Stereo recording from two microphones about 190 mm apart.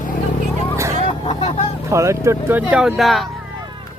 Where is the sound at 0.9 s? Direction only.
30° left (ahead or behind).